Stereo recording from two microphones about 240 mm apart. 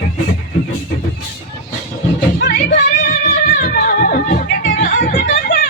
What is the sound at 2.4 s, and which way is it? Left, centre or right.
Music, left.